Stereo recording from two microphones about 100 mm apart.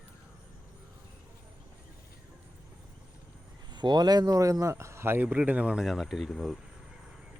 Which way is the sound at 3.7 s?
45° right (ahead or behind).